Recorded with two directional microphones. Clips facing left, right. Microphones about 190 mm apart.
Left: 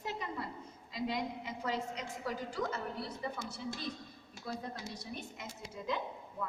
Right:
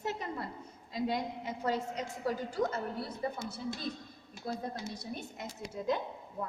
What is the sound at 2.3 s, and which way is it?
A woman's voice, 45° right (ahead or behind).